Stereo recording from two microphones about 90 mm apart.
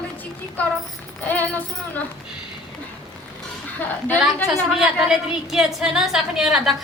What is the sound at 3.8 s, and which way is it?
Speech, 20° left (ahead or behind).